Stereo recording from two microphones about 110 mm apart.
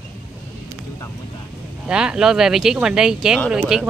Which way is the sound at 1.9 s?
5° right (ahead or behind).